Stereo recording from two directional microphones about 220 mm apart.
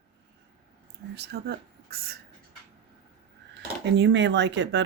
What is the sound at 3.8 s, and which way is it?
Speech, 50° right (ahead or behind).